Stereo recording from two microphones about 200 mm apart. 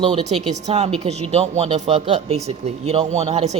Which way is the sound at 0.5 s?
35° right (ahead or behind).